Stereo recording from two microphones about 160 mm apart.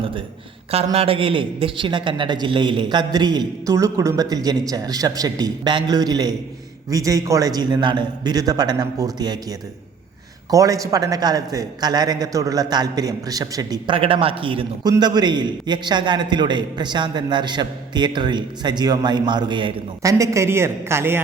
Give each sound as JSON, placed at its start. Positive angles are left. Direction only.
{"t": 0.9, "sound": "a man's voice", "side_deg": -35}